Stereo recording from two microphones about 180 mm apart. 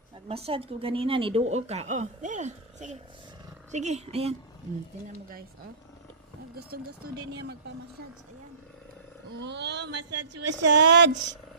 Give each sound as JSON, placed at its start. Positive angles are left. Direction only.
{"t": 0.3, "sound": "a woman's voice", "side_deg": -35}
{"t": 6.6, "sound": "speech", "side_deg": -60}
{"t": 9.4, "sound": "speech", "side_deg": -75}
{"t": 10.5, "sound": "speech", "side_deg": -80}